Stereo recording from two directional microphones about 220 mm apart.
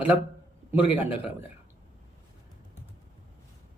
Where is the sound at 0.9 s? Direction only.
5° right (ahead or behind).